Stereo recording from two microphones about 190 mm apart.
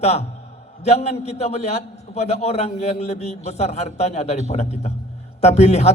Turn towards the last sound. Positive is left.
turn(degrees=35)  # may be behind; listen again after turning